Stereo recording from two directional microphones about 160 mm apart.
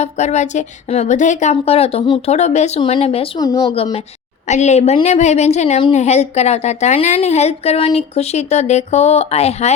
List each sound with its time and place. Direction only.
0.0 s a woman's voice: 45° left (ahead or behind)
3.3 s a woman's voice: 25° left (ahead or behind)
4.4 s a woman's voice: 45° left (ahead or behind)